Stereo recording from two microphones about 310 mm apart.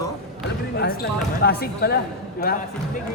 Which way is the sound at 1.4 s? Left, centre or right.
Left.